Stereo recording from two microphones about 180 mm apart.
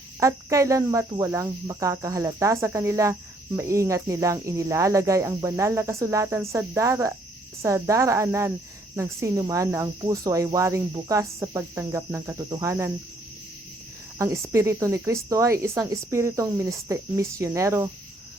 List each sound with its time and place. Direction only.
0.2 s speech: 15° right (ahead or behind)
14.2 s speech: 15° right (ahead or behind)